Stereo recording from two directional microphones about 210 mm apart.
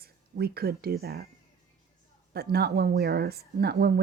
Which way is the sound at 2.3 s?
50° right (ahead or behind).